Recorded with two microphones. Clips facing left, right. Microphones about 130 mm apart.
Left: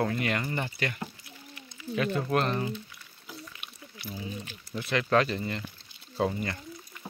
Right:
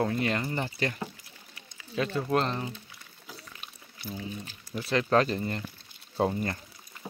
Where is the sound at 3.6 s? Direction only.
35° right (ahead or behind).